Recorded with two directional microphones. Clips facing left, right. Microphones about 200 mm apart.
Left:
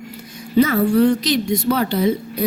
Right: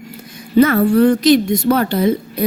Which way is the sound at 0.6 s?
55° right (ahead or behind).